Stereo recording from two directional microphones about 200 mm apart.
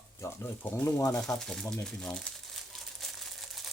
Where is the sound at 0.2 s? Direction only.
10° left (ahead or behind).